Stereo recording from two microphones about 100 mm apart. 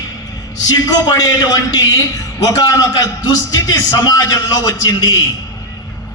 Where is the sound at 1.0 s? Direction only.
35° left (ahead or behind).